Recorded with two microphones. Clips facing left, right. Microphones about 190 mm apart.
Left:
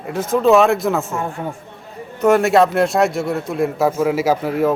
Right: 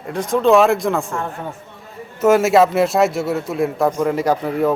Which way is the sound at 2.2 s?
Centre (ahead or behind).